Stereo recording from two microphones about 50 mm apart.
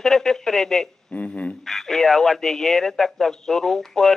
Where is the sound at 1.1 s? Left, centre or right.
Left.